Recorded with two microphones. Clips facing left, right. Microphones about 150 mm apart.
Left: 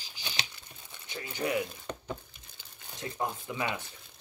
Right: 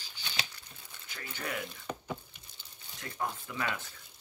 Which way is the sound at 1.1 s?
20° left (ahead or behind).